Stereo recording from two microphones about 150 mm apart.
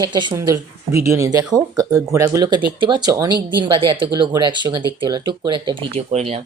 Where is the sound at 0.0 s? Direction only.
30° right (ahead or behind).